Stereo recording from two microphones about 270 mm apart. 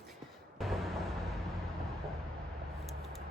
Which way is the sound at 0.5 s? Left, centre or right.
Centre.